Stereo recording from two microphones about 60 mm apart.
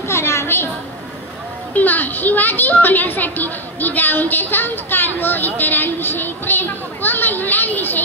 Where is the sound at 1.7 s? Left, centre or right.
Left.